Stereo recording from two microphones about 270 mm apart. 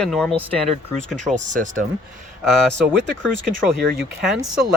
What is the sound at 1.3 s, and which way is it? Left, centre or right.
Speech, right.